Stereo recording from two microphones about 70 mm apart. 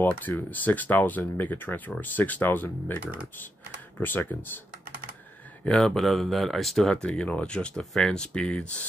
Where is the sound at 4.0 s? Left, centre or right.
Left.